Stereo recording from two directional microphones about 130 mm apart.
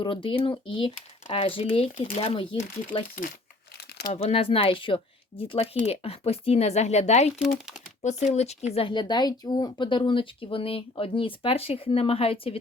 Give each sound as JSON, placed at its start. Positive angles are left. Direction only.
{"t": 0.0, "sound": "speech", "side_deg": 45}
{"t": 2.0, "sound": "speech", "side_deg": 70}
{"t": 2.3, "sound": "speech", "side_deg": 45}
{"t": 4.1, "sound": "speech", "side_deg": 50}
{"t": 8.9, "sound": "speech", "side_deg": 35}